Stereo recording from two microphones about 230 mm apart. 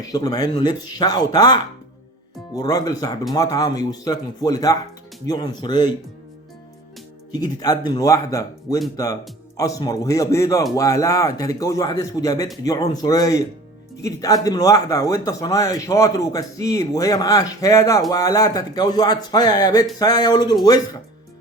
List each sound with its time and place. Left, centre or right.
0.0 s speech: centre
7.3 s speech: centre